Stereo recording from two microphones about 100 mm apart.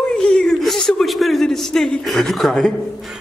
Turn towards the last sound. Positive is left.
turn(degrees=0)  # may be behind; listen again after turning